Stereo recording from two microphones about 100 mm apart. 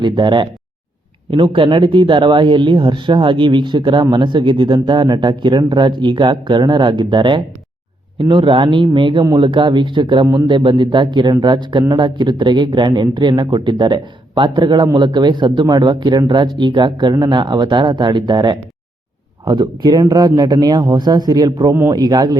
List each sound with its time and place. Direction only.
0.0 s speech: 50° right (ahead or behind)